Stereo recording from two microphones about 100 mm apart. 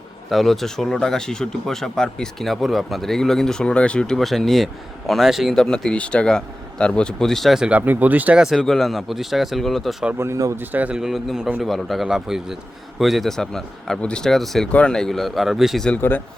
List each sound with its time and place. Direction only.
0.3 s speech: centre (ahead or behind)
7.7 s speech: 15° right (ahead or behind)
8.4 s speech: 5° right (ahead or behind)
10.2 s speech: 30° right (ahead or behind)
10.6 s speech: 15° right (ahead or behind)
10.9 s speech: 5° right (ahead or behind)
16.0 s speech: 20° left (ahead or behind)